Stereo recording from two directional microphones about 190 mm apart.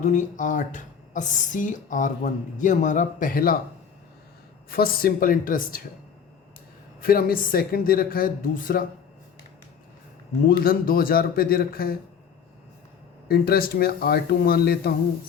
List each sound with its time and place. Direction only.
0.0 s speech: 40° left (ahead or behind)
4.7 s speech: 50° left (ahead or behind)
7.0 s speech: 50° left (ahead or behind)
10.6 s speech: 50° left (ahead or behind)
13.2 s speech: 50° left (ahead or behind)